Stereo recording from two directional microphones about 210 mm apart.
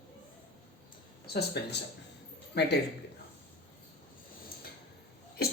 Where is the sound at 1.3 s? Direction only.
50° left (ahead or behind).